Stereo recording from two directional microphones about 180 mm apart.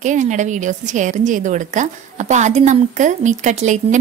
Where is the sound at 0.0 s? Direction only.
45° right (ahead or behind).